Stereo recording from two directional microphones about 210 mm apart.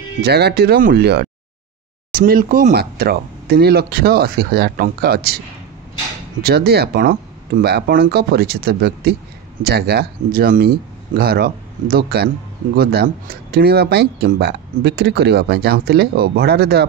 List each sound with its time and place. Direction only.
0.2 s speech: 50° right (ahead or behind)
6.4 s speech: 50° right (ahead or behind)